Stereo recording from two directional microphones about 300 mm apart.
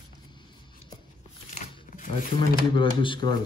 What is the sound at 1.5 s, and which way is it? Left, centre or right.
Shuffling cards, left.